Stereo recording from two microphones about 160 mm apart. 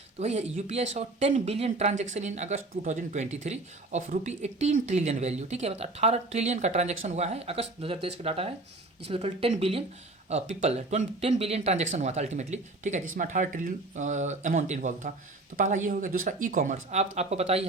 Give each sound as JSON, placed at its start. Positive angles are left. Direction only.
{"t": 0.2, "sound": "speech", "side_deg": -45}